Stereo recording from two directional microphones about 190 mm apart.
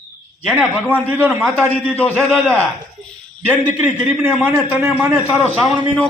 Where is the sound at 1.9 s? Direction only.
10° left (ahead or behind).